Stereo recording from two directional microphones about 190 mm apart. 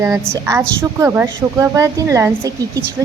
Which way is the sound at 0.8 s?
10° right (ahead or behind).